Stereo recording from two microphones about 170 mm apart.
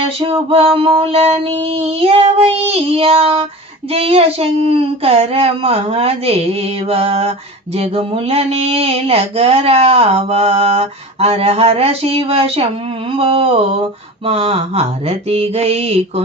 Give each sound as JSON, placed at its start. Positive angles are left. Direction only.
{"t": 0.2, "sound": "mantra", "side_deg": -35}